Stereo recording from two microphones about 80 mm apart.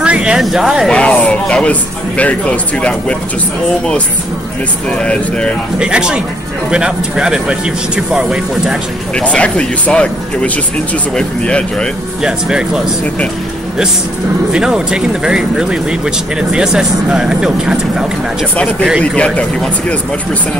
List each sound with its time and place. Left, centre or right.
0.0 s a sound: centre
0.4 s speech: centre
0.8 s a man's voice: centre
4.8 s a man's voice: centre
5.8 s speech: centre
9.1 s a man's voice: centre
12.2 s speech: centre
14.5 s speech: centre
18.6 s a man's voice: centre